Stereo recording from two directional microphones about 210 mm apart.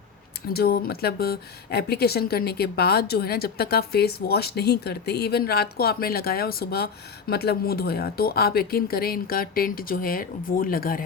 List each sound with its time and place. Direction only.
0.5 s speech: 45° left (ahead or behind)